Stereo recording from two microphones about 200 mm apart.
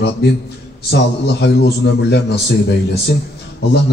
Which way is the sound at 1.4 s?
60° left (ahead or behind).